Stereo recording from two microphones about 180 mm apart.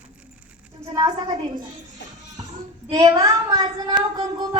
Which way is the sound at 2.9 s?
20° right (ahead or behind).